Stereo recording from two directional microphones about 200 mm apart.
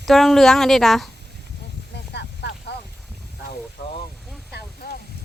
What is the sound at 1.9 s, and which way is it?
Vehicle, 55° left (ahead or behind).